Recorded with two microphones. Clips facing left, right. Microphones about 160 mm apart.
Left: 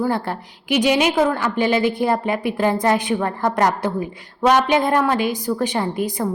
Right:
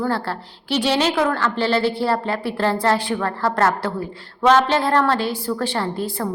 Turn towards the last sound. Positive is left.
turn(degrees=15)  # may be behind; listen again after turning